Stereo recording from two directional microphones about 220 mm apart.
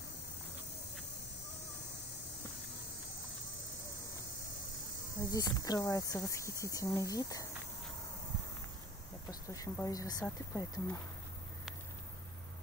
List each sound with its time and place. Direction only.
5.3 s speech: 15° left (ahead or behind)
9.3 s speech: 15° left (ahead or behind)